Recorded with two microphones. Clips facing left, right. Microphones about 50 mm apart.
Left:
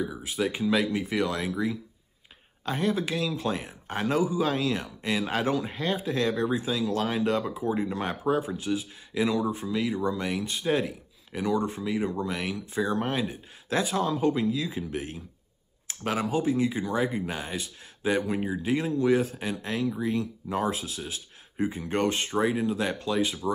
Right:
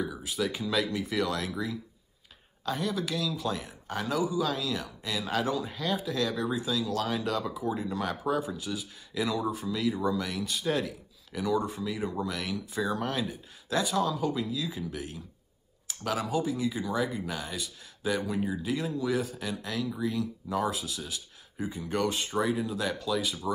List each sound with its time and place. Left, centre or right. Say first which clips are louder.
0.2 s speech: left 3 dB; left
2.6 s speech: left 4 dB; left